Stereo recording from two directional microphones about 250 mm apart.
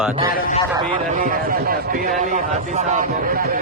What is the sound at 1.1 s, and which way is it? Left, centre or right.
A man's voice, right.